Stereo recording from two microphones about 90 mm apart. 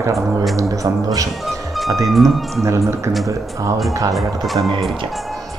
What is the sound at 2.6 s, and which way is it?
Speech, 35° right (ahead or behind).